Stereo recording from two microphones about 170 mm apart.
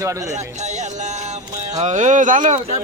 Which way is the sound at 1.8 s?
45° right (ahead or behind).